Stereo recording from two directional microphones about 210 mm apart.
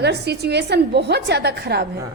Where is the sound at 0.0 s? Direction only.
50° right (ahead or behind).